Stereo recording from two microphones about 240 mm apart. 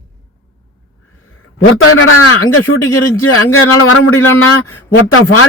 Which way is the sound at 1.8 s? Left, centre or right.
Left.